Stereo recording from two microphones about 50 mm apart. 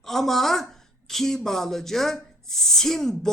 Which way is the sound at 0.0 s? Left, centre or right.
Centre.